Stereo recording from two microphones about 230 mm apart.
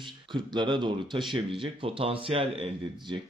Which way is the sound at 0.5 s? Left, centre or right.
Centre.